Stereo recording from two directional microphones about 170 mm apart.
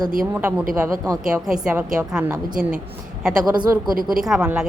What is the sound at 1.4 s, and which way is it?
Speech, 5° right (ahead or behind).